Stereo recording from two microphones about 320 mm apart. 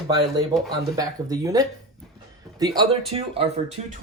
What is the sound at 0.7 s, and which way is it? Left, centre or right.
Speech, centre.